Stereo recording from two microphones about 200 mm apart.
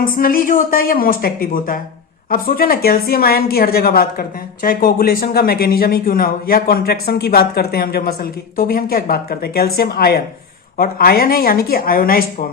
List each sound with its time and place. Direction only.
0.0 s a woman's voice: 45° left (ahead or behind)